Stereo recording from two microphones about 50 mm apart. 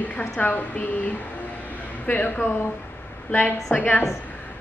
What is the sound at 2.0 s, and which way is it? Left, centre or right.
A woman's voice, left.